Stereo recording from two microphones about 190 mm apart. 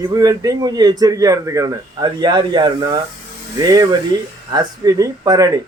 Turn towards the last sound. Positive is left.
turn(degrees=-20)  # may be behind; listen again after turning